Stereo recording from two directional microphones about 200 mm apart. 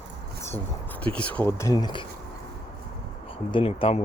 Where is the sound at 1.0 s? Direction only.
5° left (ahead or behind).